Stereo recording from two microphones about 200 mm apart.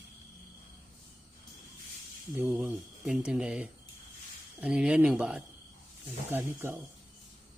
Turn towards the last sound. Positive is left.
turn(degrees=-10)  # may be behind; listen again after turning